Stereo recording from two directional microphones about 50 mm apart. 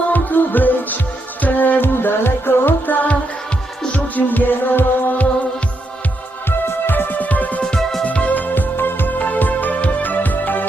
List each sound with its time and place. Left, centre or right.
0.1 s music: left
6.8 s music: left